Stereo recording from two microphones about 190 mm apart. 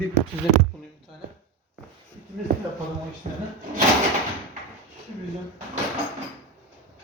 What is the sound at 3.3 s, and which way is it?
Speech, 35° right (ahead or behind).